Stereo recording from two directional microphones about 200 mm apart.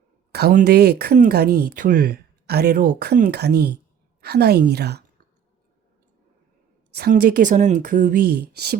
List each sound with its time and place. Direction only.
0.3 s a sound: 55° right (ahead or behind)
0.5 s speech: 50° right (ahead or behind)
7.1 s speech: 40° right (ahead or behind)